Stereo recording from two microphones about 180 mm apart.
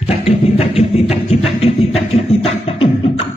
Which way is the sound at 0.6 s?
35° left (ahead or behind).